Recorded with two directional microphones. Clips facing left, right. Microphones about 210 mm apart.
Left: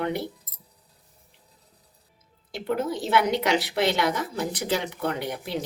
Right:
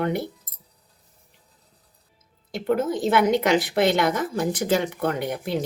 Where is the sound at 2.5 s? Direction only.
50° right (ahead or behind).